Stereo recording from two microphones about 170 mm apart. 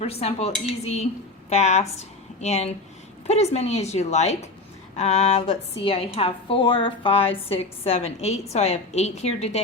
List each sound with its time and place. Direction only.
0.0 s a woman's voice: 35° left (ahead or behind)